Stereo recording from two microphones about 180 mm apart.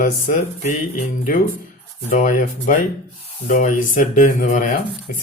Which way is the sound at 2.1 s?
45° left (ahead or behind).